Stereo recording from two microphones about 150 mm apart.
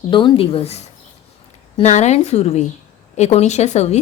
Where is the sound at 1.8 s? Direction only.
50° left (ahead or behind).